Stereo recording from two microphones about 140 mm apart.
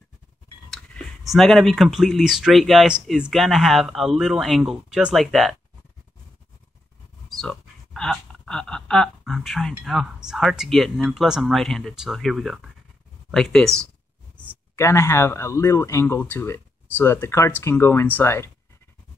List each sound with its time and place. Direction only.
0.7 s speech: centre (ahead or behind)
7.2 s speech: 5° left (ahead or behind); by 18.5 s 20° left (ahead or behind)